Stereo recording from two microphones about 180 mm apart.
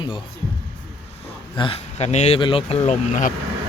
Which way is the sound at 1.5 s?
30° left (ahead or behind).